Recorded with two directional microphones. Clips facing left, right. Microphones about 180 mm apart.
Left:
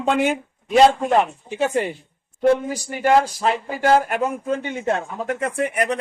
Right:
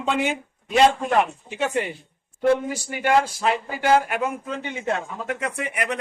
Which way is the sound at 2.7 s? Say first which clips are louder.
Left 3 dB; 40° left (ahead or behind).